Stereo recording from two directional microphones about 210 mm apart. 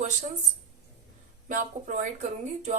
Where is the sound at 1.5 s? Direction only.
40° right (ahead or behind).